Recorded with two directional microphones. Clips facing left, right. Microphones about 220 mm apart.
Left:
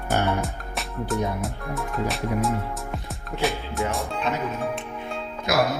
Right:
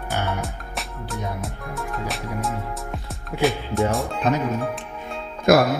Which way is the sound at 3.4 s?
Centre (ahead or behind).